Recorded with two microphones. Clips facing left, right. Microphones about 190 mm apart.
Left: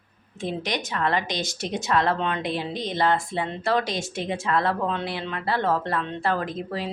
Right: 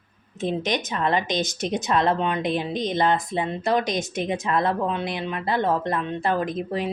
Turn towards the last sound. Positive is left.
turn(degrees=-20)  # may be behind; listen again after turning